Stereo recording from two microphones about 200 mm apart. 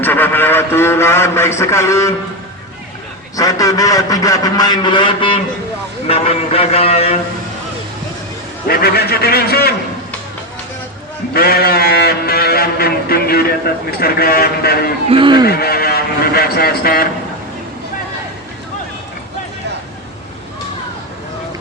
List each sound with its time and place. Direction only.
0.0 s a man's voice: 10° left (ahead or behind)
3.3 s a man's voice: 15° left (ahead or behind)
8.6 s sheep: 50° left (ahead or behind)
11.3 s sheep: 50° left (ahead or behind)
15.1 s speech: 25° right (ahead or behind)
15.4 s sheep: 50° left (ahead or behind)